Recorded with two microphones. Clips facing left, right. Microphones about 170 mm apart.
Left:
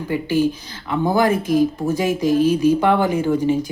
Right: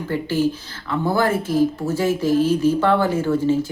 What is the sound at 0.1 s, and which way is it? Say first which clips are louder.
Speech: left 2 dB; 15° left (ahead or behind).